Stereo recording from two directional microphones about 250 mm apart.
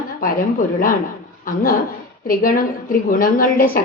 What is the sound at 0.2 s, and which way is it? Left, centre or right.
Speech, left.